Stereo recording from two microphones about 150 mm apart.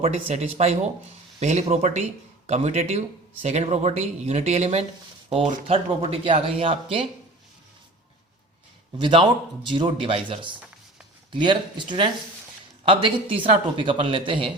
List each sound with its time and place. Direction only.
0.0 s speech: 40° right (ahead or behind)
5.6 s speech: 40° right (ahead or behind)
9.0 s speech: 35° right (ahead or behind)